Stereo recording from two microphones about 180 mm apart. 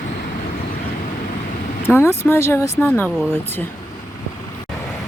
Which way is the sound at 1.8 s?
15° left (ahead or behind).